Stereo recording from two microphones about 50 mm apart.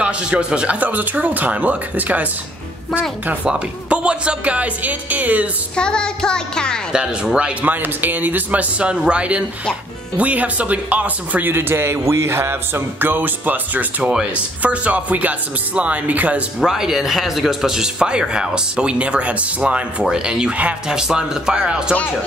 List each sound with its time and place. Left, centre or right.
0.0 s speech: right
0.7 s speech: right
3.4 s speech: right
5.8 s music: centre
6.9 s speech: centre
7.6 s speech: right
11.4 s speech: right
13.1 s speech: right
16.5 s speech: centre